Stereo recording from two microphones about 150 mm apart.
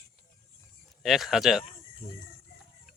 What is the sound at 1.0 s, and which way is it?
Speech, centre (ahead or behind).